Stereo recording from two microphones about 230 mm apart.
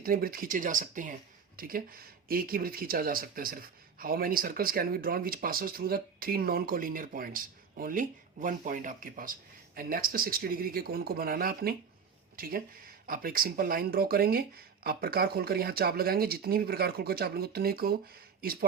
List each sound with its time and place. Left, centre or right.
0.0 s speech: right